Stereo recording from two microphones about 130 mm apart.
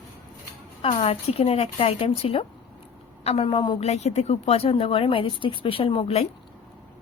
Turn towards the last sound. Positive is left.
turn(degrees=50)  # may be behind; listen again after turning